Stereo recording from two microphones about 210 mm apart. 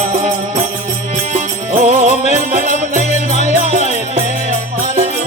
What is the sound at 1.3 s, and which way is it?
Music, 35° right (ahead or behind).